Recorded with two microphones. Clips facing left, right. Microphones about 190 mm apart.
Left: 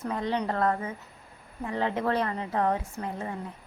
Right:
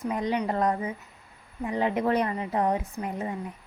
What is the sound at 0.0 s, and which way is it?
A woman's voice, 15° right (ahead or behind).